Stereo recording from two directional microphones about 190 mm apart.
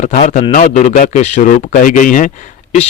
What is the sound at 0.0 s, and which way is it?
A man's voice, 40° left (ahead or behind).